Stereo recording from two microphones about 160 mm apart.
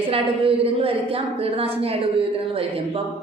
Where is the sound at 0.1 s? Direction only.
35° right (ahead or behind).